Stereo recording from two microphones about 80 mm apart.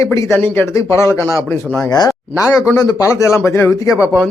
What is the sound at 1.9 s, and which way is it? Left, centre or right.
Speech, left.